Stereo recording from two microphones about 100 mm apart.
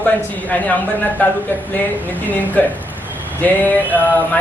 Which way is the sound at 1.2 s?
15° left (ahead or behind).